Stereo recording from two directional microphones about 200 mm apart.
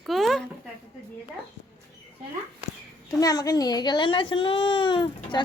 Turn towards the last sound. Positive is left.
turn(degrees=25)  # may be behind; listen again after turning